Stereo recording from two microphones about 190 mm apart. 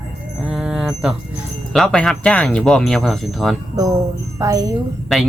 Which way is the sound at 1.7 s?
5° left (ahead or behind).